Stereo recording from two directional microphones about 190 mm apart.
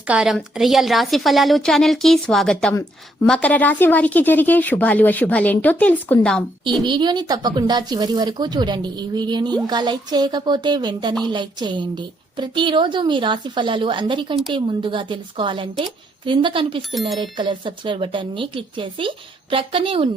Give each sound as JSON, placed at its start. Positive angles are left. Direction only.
{"t": 0.1, "sound": "a woman's voice", "side_deg": 0}
{"t": 6.8, "sound": "a woman's voice", "side_deg": -25}
{"t": 16.9, "sound": "a woman's voice", "side_deg": 0}
{"t": 17.2, "sound": "a woman's voice", "side_deg": -25}